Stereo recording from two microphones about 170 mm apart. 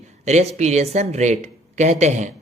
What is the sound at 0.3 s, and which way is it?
A man's voice, 40° right (ahead or behind).